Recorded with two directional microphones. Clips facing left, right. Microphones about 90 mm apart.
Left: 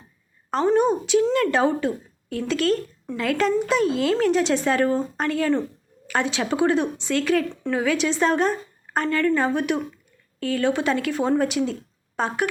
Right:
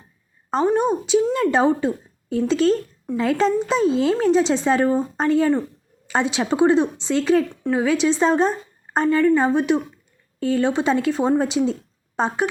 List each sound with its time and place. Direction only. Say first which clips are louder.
0.5 s a woman's voice: even; 15° right (ahead or behind)